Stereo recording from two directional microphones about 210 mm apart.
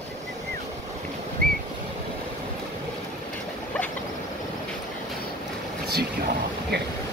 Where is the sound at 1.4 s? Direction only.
45° right (ahead or behind).